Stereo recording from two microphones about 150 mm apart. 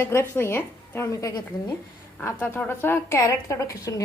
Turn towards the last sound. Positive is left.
turn(degrees=20)  # may be behind; listen again after turning